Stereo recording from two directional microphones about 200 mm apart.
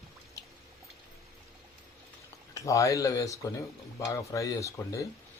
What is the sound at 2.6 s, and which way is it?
Speech, 15° left (ahead or behind).